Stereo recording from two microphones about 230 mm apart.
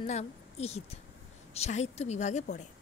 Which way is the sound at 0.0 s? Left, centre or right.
Left.